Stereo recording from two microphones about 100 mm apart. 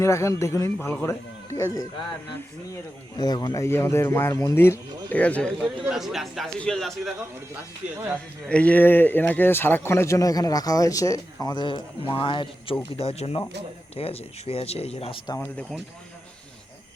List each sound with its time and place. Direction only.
0.0 s speech: 30° left (ahead or behind)
3.2 s speech: 45° left (ahead or behind)
3.6 s speech: 25° left (ahead or behind)
5.0 s speech: 15° left (ahead or behind)
5.8 s speech: centre (ahead or behind)
8.4 s speech: 10° left (ahead or behind); by 12.7 s 55° left (ahead or behind)
13.0 s speech: 90° left